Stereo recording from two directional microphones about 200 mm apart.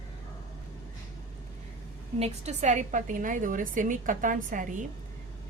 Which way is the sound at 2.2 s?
35° right (ahead or behind).